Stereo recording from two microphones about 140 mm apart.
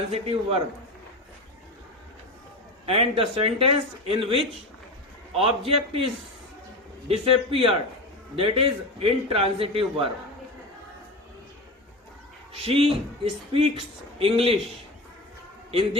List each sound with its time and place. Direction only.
0.1 s a man's voice: 40° right (ahead or behind)
2.8 s a man's voice: 40° right (ahead or behind)
7.1 s a man's voice: 40° right (ahead or behind)
12.6 s a man's voice: 40° right (ahead or behind)